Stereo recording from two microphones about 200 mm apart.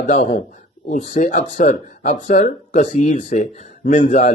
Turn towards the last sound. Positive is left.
turn(degrees=40)  # may be behind; listen again after turning